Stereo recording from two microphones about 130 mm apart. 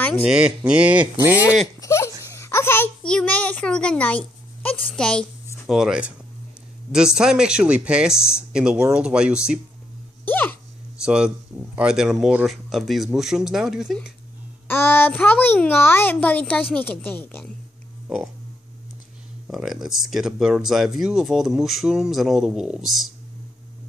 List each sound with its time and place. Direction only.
0.1 s speech: 5° right (ahead or behind)
1.8 s a child's voice: 20° left (ahead or behind); by 5.2 s 5° left (ahead or behind)
5.7 s speech: 5° right (ahead or behind)
10.2 s hiccup: 15° left (ahead or behind)
11.1 s speech: 5° right (ahead or behind)
14.7 s a child's voice: 15° left (ahead or behind)
18.0 s speech: 5° right (ahead or behind)
19.4 s speech: centre (ahead or behind)